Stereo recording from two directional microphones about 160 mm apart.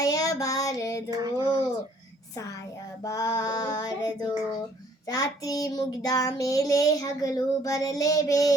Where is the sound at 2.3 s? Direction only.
20° left (ahead or behind).